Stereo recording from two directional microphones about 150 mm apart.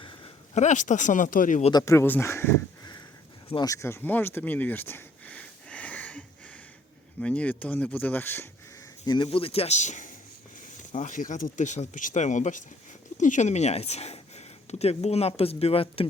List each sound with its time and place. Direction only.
0.5 s speech: 55° left (ahead or behind)
1.7 s speech: 20° left (ahead or behind)
3.5 s a sound: 25° left (ahead or behind)
7.2 s speech: 10° left (ahead or behind)
9.0 s speech: 35° left (ahead or behind)